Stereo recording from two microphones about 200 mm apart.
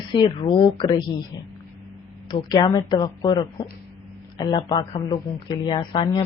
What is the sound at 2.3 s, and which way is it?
Speech, 20° left (ahead or behind).